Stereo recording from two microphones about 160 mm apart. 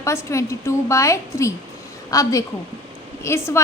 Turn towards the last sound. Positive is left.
turn(degrees=15)  # may be behind; listen again after turning